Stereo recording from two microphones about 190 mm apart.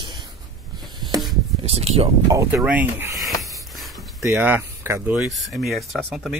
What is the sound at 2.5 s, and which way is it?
Speech, 5° right (ahead or behind).